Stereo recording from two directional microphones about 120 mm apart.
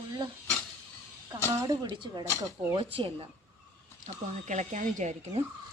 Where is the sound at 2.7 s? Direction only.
50° right (ahead or behind).